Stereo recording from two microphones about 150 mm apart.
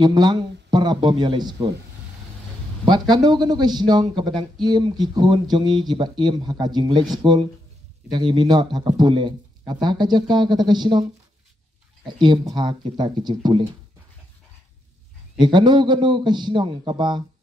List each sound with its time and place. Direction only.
0.0 s a man's voice: 25° right (ahead or behind)
2.8 s a man's voice: 30° right (ahead or behind)
12.1 s a man's voice: 30° right (ahead or behind)
15.3 s a man's voice: 30° right (ahead or behind)